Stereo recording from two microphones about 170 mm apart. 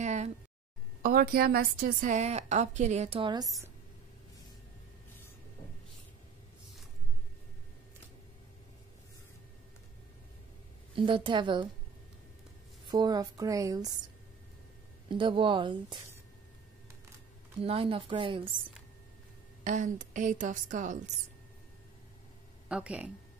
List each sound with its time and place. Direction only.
0.0 s a sound: 45° right (ahead or behind)
1.0 s a woman's voice: 60° right (ahead or behind); by 3.4 s 30° right (ahead or behind)
11.0 s speech: 30° right (ahead or behind)
12.9 s speech: 20° right (ahead or behind)
15.0 s speech: 30° right (ahead or behind)
17.6 s speech: 35° right (ahead or behind)
19.6 s a woman's voice: 45° right (ahead or behind)
22.7 s speech: 5° right (ahead or behind)